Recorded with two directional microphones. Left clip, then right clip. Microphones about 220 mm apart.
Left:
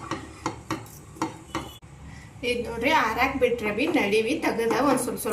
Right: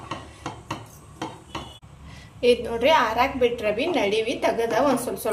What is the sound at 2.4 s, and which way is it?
A woman's voice, 45° right (ahead or behind).